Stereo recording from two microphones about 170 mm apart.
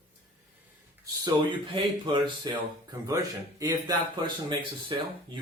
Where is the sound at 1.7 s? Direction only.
30° right (ahead or behind).